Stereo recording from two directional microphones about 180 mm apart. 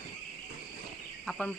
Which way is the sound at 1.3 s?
Centre (ahead or behind).